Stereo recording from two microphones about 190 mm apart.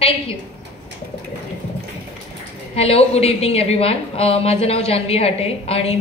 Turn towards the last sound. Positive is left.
turn(degrees=30)  # may be behind; listen again after turning